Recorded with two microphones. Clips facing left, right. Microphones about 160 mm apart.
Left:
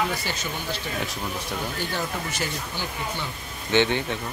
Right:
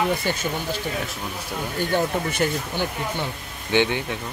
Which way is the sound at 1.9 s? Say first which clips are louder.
Right 7 dB; 55° right (ahead or behind).